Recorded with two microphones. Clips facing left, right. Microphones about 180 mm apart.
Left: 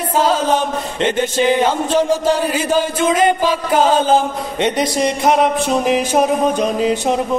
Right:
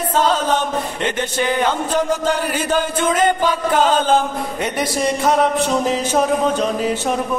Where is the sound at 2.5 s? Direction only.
10° left (ahead or behind).